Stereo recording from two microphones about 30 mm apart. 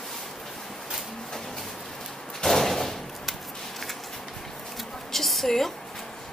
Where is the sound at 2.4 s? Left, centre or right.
Centre.